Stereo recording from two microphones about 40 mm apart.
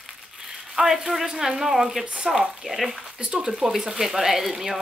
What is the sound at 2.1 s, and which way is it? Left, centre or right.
Speech, right.